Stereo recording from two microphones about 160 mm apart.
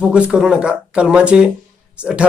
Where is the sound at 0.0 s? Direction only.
5° right (ahead or behind).